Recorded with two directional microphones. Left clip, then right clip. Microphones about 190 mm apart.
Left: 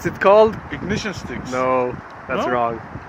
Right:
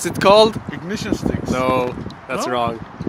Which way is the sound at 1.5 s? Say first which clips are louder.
Even; 25° right (ahead or behind).